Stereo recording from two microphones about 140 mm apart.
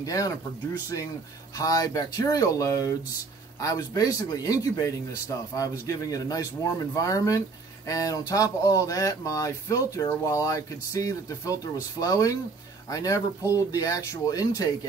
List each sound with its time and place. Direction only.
0.0 s speech: 25° left (ahead or behind)
1.6 s speech: 25° left (ahead or behind)